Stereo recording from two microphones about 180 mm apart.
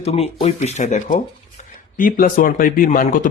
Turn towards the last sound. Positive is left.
turn(degrees=50)  # may be behind; listen again after turning